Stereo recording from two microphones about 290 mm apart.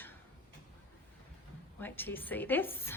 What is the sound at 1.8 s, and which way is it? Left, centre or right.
A woman's voice, centre.